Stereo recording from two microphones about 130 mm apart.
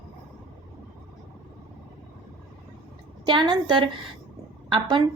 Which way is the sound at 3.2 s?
40° right (ahead or behind).